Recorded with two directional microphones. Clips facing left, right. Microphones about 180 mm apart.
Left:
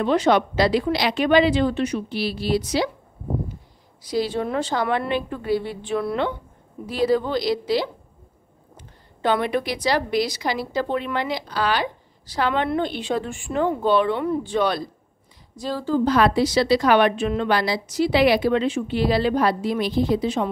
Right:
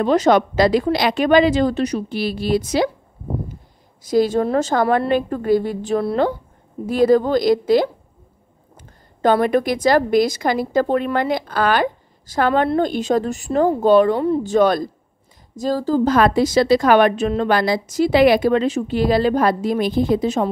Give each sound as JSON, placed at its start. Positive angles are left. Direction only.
{"t": 0.0, "sound": "a woman's voice", "side_deg": -40}
{"t": 4.0, "sound": "a woman's voice", "side_deg": -50}